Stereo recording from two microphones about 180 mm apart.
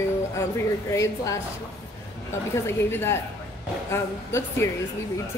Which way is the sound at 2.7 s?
15° left (ahead or behind).